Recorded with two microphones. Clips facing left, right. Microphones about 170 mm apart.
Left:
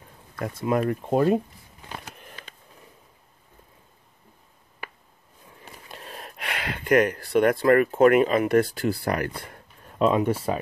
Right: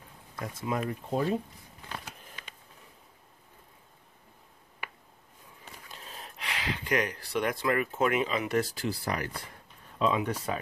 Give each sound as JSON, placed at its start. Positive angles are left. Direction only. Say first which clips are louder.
{"t": 0.4, "sound": "speech", "louder": "left 8 dB", "side_deg": 60}
{"t": 5.9, "sound": "speech", "louder": "left 7 dB", "side_deg": 65}
{"t": 9.4, "sound": "a sound", "louder": "left 5 dB", "side_deg": 60}